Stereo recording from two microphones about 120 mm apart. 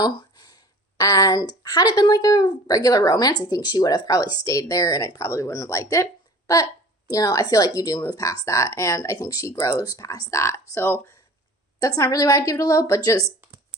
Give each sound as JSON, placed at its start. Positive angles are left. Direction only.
{"t": 0.0, "sound": "a sound", "side_deg": 35}
{"t": 1.6, "sound": "a woman's voice", "side_deg": 35}
{"t": 7.1, "sound": "a woman's voice", "side_deg": 30}
{"t": 11.8, "sound": "speech", "side_deg": 30}